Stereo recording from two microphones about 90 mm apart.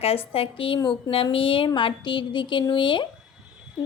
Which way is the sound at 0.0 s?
90° left.